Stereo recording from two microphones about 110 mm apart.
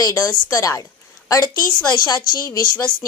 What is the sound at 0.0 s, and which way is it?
A woman's voice, 30° left (ahead or behind).